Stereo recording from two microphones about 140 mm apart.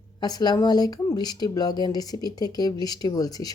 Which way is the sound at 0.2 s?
30° left (ahead or behind).